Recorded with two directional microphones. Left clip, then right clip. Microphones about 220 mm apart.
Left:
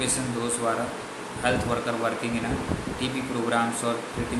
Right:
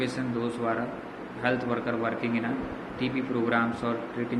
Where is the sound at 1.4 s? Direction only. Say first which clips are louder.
Left 2 dB; 10° left (ahead or behind).